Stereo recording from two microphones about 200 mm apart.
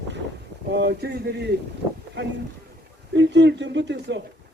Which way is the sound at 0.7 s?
60° right (ahead or behind).